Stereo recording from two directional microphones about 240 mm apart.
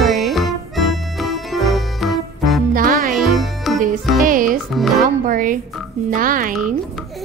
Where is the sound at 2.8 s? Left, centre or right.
Right.